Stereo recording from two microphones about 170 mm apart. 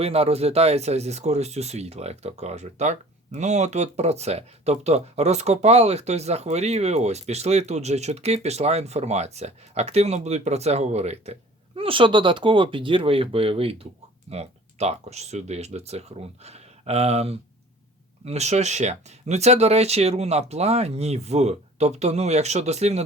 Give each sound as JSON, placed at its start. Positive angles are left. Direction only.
{"t": 0.0, "sound": "speech", "side_deg": -35}